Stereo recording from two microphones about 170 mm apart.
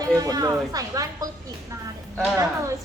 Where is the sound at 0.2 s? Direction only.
20° right (ahead or behind).